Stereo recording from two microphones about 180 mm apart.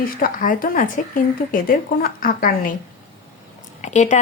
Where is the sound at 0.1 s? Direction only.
50° left (ahead or behind).